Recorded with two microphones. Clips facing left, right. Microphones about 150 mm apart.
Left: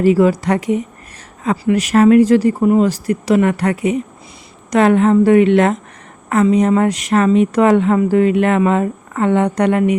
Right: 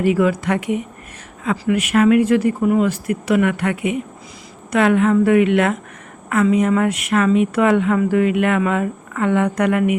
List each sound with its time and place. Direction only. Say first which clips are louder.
0.0 s speech: left 4 dB; 35° left (ahead or behind)